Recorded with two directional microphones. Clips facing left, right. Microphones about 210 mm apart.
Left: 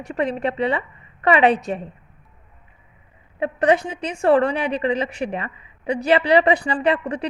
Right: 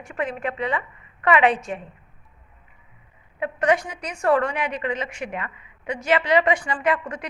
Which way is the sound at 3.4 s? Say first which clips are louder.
Left 3 dB; 30° left (ahead or behind).